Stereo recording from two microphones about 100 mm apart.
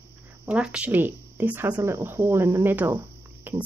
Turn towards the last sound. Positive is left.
turn(degrees=-20)  # may be behind; listen again after turning